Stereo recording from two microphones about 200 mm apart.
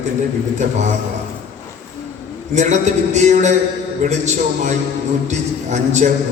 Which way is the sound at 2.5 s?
35° right (ahead or behind).